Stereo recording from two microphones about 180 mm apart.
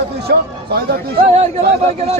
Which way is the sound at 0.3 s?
65° right (ahead or behind).